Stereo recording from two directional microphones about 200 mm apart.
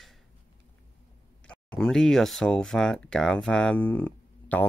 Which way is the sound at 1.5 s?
5° left (ahead or behind).